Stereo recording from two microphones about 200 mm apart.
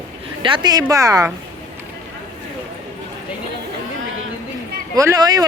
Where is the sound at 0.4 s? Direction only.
25° right (ahead or behind).